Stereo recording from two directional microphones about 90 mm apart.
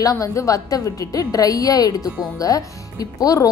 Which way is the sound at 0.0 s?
40° left (ahead or behind).